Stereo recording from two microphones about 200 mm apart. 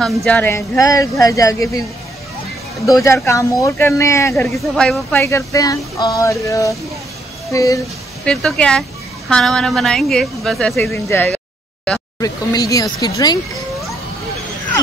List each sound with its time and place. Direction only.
0.0 s speech: 5° left (ahead or behind)
2.9 s speech: 15° left (ahead or behind)
4.4 s speech: centre (ahead or behind)
8.3 s a woman's voice: 5° left (ahead or behind)
10.9 s a sound: 10° left (ahead or behind)
12.2 s speech: 15° left (ahead or behind)